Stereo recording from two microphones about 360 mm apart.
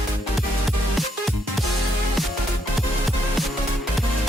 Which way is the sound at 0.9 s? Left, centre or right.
Centre.